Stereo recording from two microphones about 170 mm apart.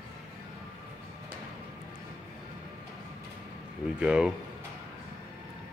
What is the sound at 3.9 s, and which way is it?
Speech, 5° right (ahead or behind).